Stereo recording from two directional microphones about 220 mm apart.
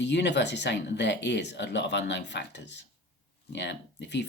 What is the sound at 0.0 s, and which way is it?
Speech, 50° left (ahead or behind).